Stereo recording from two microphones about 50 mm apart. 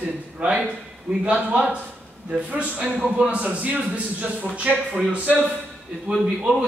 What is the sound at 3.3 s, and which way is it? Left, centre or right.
A man's voice, right.